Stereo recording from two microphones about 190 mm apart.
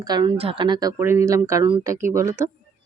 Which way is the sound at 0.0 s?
20° right (ahead or behind).